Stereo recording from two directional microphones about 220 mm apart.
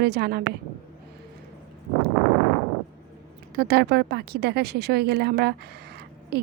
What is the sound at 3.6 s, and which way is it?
A woman's voice, 45° right (ahead or behind).